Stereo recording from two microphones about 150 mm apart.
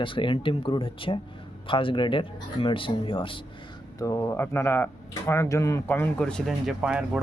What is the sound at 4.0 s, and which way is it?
Speech, 20° left (ahead or behind).